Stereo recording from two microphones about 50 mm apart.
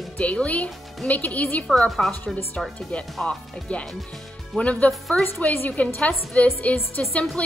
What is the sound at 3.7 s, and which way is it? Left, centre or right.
A woman's voice, left.